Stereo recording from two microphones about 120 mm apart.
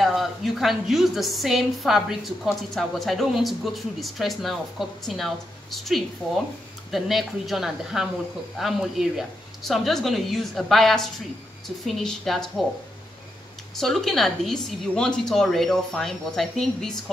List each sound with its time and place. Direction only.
0.0 s a woman's voice: centre (ahead or behind)
13.7 s a woman's voice: centre (ahead or behind)